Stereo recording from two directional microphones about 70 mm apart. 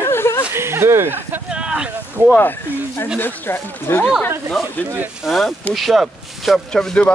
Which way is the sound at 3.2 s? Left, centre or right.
Left.